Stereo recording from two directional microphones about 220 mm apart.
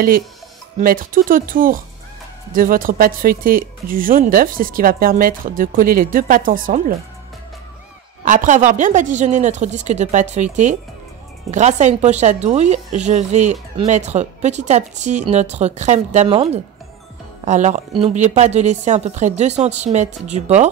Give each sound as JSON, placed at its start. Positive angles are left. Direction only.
{"t": 0.7, "sound": "a woman's voice", "side_deg": -40}
{"t": 8.3, "sound": "a woman's voice", "side_deg": -35}